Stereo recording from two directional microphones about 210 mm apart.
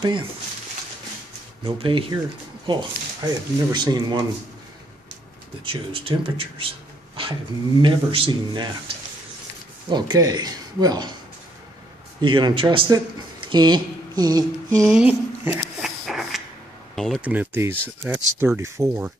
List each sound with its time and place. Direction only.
1.6 s speech: 20° right (ahead or behind)
5.7 s speech: 25° right (ahead or behind)
7.8 s speech: 25° right (ahead or behind)
12.2 s speech: 20° right (ahead or behind)
13.5 s a sound: 20° right (ahead or behind)
14.9 s a sound: 5° right (ahead or behind)
16.9 s speech: centre (ahead or behind)